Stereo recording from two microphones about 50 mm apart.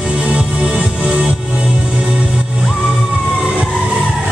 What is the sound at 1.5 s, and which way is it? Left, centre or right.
Music, right.